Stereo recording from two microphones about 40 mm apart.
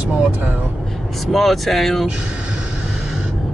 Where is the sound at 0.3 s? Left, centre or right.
Right.